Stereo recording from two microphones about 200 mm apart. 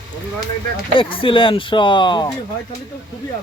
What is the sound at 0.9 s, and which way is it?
Speech, 25° left (ahead or behind).